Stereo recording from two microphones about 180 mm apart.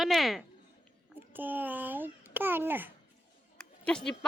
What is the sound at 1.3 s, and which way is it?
A child's voice, 10° right (ahead or behind).